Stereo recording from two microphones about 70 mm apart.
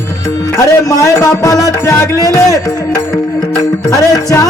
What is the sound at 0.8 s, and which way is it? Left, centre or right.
Music, left.